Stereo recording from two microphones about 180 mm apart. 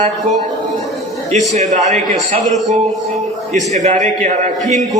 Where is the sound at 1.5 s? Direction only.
40° right (ahead or behind).